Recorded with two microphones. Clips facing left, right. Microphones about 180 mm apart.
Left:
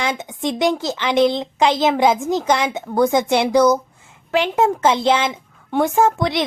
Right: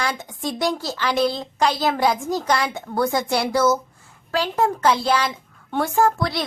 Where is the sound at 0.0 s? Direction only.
20° left (ahead or behind).